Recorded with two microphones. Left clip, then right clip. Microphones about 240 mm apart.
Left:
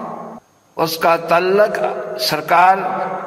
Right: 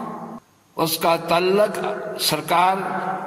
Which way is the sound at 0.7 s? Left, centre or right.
Right.